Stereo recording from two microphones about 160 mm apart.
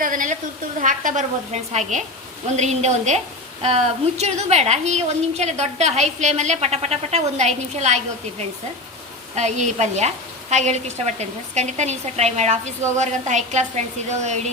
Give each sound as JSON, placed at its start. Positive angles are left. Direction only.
{"t": 0.0, "sound": "sizzle", "side_deg": -55}
{"t": 0.8, "sound": "a woman's voice", "side_deg": -50}